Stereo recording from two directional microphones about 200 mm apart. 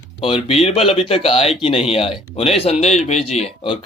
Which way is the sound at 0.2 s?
25° left (ahead or behind).